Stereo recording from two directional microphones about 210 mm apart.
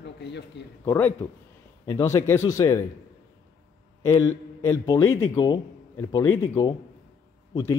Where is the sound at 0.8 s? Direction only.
10° left (ahead or behind).